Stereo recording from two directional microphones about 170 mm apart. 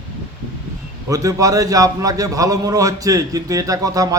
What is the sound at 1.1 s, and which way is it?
A man's voice, 20° right (ahead or behind).